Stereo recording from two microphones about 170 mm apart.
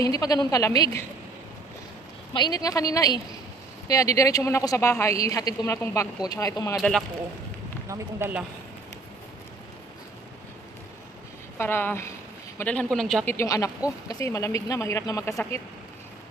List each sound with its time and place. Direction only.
0.0 s speech: 20° left (ahead or behind)
2.3 s speech: 25° left (ahead or behind)
6.8 s speech: centre (ahead or behind)
7.9 s a man's voice: 10° right (ahead or behind)
11.5 s a woman's voice: 10° left (ahead or behind)
13.3 s a woman's voice: 15° left (ahead or behind)